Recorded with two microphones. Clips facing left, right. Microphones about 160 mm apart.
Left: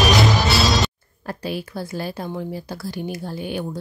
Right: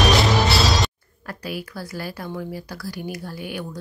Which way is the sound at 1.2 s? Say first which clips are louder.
Left 3 dB; 25° left (ahead or behind).